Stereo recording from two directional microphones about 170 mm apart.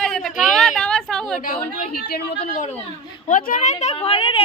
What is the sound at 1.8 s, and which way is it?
Speech, 60° left (ahead or behind).